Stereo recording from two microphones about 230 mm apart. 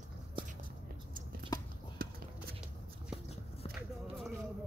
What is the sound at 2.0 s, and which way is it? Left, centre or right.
Clip-clop, right.